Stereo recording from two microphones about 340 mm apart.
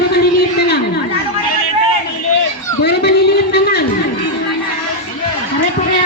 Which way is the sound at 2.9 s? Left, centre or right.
Left.